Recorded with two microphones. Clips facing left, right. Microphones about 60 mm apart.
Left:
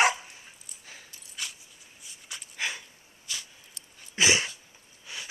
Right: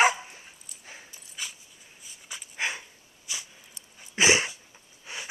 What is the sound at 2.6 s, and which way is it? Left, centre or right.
Dog, right.